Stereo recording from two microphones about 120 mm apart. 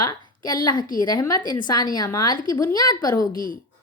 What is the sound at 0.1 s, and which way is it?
A woman's voice, 35° left (ahead or behind).